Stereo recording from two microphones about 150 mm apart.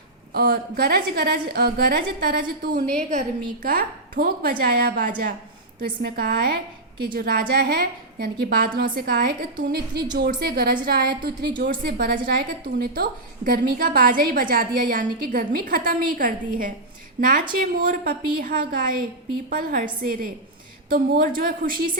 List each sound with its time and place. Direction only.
0.3 s a woman's voice: 90° right
3.0 s a woman's voice: 55° right (ahead or behind)
5.8 s a woman's voice: 85° right